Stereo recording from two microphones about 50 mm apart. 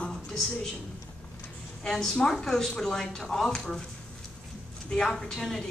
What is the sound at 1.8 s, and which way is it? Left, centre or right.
A woman's voice, centre.